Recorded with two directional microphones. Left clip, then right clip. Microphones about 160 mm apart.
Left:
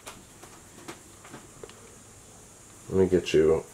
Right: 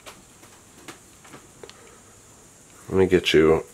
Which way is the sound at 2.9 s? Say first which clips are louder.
Right 5 dB; 30° right (ahead or behind).